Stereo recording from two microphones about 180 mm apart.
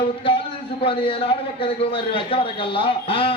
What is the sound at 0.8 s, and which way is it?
A man's voice, 30° left (ahead or behind).